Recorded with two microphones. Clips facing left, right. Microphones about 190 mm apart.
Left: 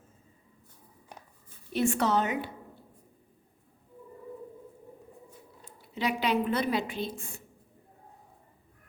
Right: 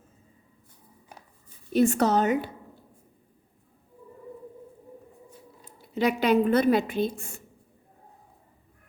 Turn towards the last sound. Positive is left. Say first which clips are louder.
# right 7 dB
turn(degrees=-45)  # may be behind; listen again after turning